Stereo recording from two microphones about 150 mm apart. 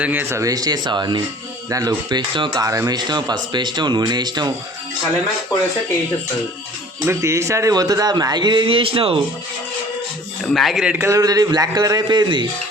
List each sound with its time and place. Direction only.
0.0 s speech: 10° right (ahead or behind); by 4.5 s 30° right (ahead or behind)
7.0 s speech: 20° right (ahead or behind); by 9.2 s 35° right (ahead or behind)
10.5 s speech: centre (ahead or behind)
11.0 s speech: 25° right (ahead or behind)